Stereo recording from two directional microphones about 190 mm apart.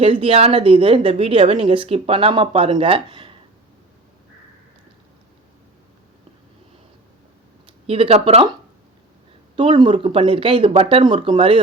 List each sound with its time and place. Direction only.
0.0 s a woman's voice: 30° right (ahead or behind)
7.9 s a woman's voice: 30° right (ahead or behind)
9.6 s a woman's voice: 25° right (ahead or behind)